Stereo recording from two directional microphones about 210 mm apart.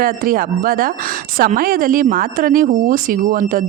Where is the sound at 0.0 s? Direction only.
45° right (ahead or behind).